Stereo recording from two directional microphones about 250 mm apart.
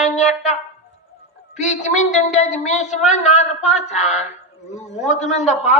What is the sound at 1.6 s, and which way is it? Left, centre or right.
Speech, left.